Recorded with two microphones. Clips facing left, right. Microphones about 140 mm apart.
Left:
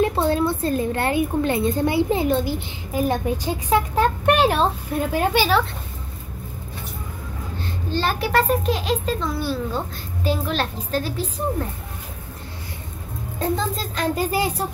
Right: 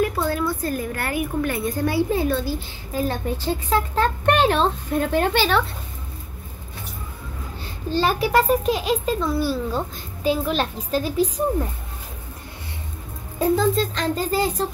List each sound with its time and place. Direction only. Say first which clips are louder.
0.0 s a woman's voice: left 3 dB; 25° left (ahead or behind); by 5.6 s 10° left (ahead or behind)
8.0 s a child's voice: right 2 dB; 5° right (ahead or behind)
13.4 s speech: right 5 dB; centre (ahead or behind)